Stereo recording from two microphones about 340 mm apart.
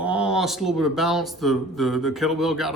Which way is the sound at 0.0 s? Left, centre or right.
Centre.